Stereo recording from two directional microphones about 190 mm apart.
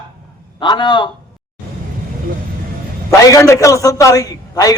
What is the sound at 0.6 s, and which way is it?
Speech, 25° left (ahead or behind).